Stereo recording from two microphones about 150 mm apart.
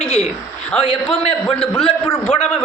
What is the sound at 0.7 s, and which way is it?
A man's voice, 10° left (ahead or behind).